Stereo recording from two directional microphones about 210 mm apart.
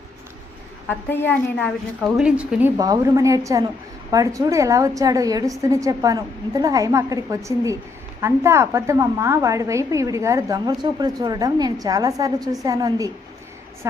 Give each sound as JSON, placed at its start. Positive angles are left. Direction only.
{"t": 0.9, "sound": "a woman's voice", "side_deg": 10}
{"t": 2.1, "sound": "a woman's voice", "side_deg": -5}